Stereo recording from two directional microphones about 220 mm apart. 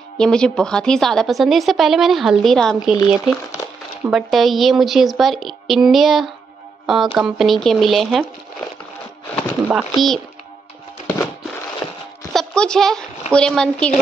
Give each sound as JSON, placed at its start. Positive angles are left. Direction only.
{"t": 0.2, "sound": "a woman's voice", "side_deg": 5}
{"t": 4.0, "sound": "a woman's voice", "side_deg": 0}
{"t": 9.7, "sound": "a woman's voice", "side_deg": -5}
{"t": 11.1, "sound": "a sound", "side_deg": 10}
{"t": 12.3, "sound": "a sound", "side_deg": 0}
{"t": 13.3, "sound": "a woman's voice", "side_deg": 5}